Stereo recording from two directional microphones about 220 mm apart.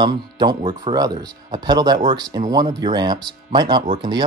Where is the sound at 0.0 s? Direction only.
20° right (ahead or behind).